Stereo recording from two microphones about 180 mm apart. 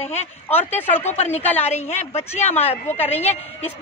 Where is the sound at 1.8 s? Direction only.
35° left (ahead or behind).